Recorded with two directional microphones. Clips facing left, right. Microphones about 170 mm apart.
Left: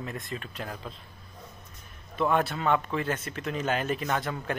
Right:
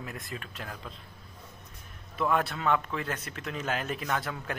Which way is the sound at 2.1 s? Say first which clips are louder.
Left 2 dB; centre (ahead or behind).